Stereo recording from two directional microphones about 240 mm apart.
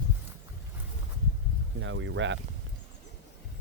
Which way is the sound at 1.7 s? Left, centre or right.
Right.